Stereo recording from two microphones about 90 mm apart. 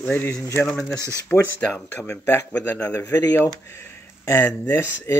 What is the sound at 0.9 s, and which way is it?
Speech, 35° right (ahead or behind).